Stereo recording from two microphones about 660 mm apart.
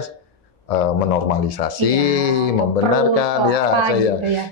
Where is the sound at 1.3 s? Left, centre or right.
Left.